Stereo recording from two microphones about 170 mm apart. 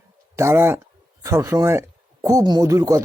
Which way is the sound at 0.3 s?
15° right (ahead or behind).